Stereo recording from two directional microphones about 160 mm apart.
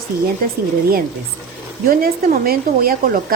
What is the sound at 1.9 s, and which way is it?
A woman's voice, 65° right (ahead or behind).